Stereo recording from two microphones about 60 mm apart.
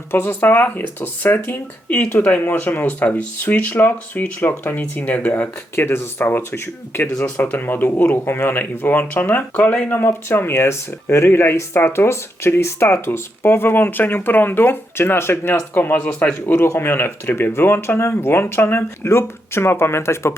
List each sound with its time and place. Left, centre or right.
0.1 s speech: left
3.4 s speech: left
4.8 s speech: left
5.7 s speech: left
7.3 s speech: left
16.0 s speech: centre
16.7 s speech: left